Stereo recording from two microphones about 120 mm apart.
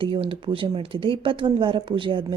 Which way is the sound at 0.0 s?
45° right (ahead or behind).